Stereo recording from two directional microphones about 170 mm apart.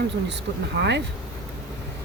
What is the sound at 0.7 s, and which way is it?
Speech, 65° right (ahead or behind).